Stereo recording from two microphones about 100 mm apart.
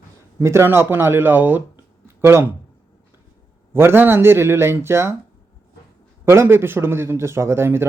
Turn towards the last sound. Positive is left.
turn(degrees=-25)  # may be behind; listen again after turning